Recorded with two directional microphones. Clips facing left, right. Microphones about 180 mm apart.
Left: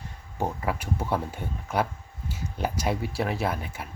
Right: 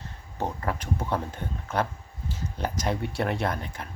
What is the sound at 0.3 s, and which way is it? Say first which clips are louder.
Speech: left 1 dB; 10° left (ahead or behind).